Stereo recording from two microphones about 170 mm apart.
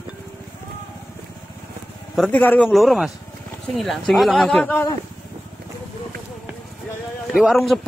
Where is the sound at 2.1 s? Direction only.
5° left (ahead or behind).